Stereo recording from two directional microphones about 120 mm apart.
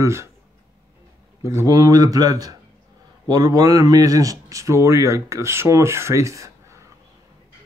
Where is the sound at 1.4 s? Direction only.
30° right (ahead or behind).